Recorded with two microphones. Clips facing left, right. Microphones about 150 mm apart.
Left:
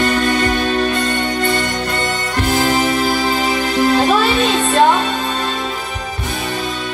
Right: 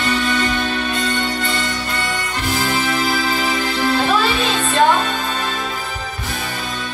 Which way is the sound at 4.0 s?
40° left (ahead or behind).